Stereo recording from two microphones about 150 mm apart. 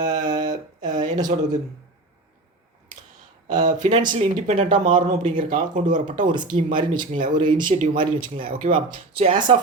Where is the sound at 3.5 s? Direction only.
55° right (ahead or behind).